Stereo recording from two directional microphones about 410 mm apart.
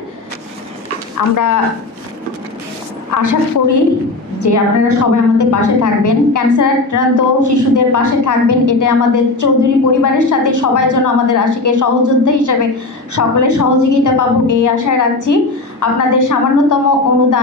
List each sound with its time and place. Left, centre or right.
1.1 s speech: left
3.1 s a woman's voice: left